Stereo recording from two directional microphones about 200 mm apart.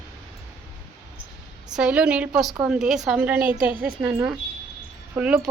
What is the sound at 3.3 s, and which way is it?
Speech, 45° right (ahead or behind).